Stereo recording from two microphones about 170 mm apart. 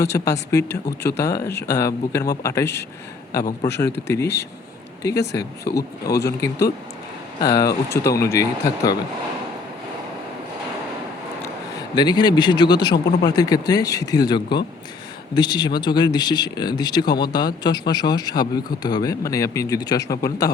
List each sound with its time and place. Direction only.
0.0 s speech: 15° left (ahead or behind)
11.9 s speech: 25° left (ahead or behind)